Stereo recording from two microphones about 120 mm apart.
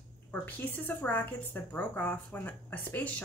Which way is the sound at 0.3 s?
15° left (ahead or behind).